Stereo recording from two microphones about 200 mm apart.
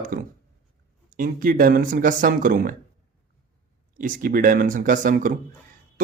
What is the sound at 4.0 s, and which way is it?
A man's voice, 40° right (ahead or behind).